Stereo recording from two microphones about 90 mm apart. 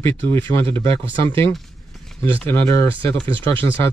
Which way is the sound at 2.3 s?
25° left (ahead or behind).